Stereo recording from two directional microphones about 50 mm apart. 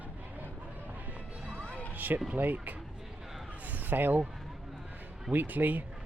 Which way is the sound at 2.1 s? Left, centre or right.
Right.